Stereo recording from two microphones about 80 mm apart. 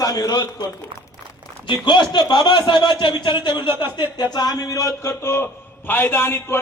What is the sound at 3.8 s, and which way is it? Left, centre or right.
Speech, left.